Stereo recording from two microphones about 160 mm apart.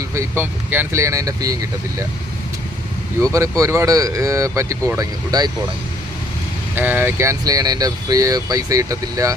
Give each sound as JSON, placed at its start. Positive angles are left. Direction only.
{"t": 0.1, "sound": "speech", "side_deg": -15}
{"t": 3.3, "sound": "speech", "side_deg": -20}
{"t": 6.7, "sound": "speech", "side_deg": -10}